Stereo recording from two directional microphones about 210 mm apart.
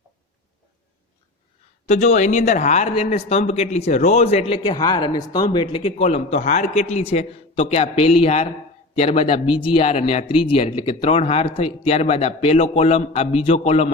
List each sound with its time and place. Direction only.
1.9 s a man's voice: 35° left (ahead or behind)